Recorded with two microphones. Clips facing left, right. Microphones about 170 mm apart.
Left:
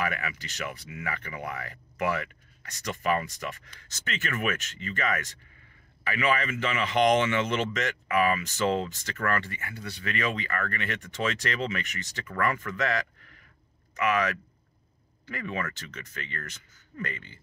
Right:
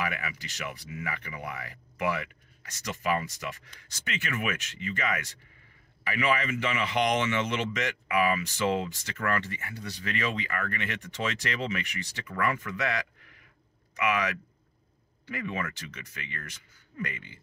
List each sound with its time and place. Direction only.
0.0 s a man's voice: 15° right (ahead or behind)